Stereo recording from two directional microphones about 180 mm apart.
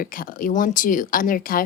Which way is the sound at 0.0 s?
50° left (ahead or behind).